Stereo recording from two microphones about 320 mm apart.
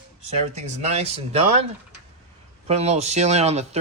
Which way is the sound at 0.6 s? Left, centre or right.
Centre.